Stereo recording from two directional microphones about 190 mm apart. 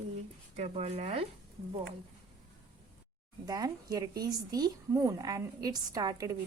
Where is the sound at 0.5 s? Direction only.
35° right (ahead or behind).